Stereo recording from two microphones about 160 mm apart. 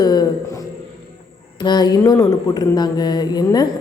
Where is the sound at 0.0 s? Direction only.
25° left (ahead or behind).